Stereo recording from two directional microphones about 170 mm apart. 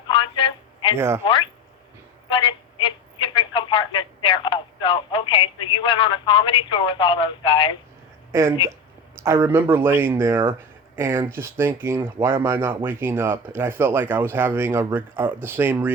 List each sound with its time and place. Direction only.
0.1 s a sound: 30° left (ahead or behind)
0.9 s speech: 15° right (ahead or behind)
2.3 s speech: 30° left (ahead or behind)
8.3 s speech: 15° right (ahead or behind)